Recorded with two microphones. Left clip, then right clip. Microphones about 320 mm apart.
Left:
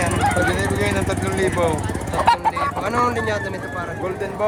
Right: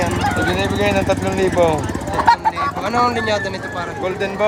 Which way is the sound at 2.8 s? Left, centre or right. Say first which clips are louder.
Right 4 dB; centre.